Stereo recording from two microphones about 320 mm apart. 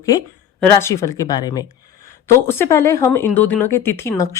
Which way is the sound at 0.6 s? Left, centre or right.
Centre.